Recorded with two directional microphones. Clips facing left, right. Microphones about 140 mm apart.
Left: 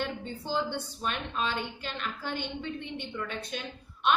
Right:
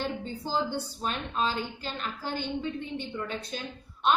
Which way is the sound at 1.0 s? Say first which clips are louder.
Right 2 dB; 35° right (ahead or behind).